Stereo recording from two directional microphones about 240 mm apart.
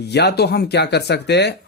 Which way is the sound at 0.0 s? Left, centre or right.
Left.